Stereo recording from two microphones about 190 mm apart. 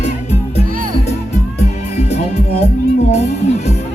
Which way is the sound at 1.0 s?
35° left (ahead or behind).